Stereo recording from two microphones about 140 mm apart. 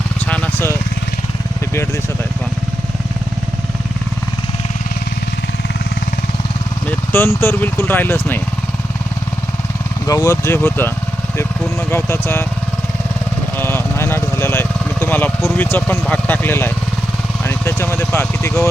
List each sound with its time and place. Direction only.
0.3 s vehicle: 10° left (ahead or behind)
7.1 s speech: 15° left (ahead or behind)
10.1 s speech: 20° left (ahead or behind)
13.6 s speech: 15° left (ahead or behind)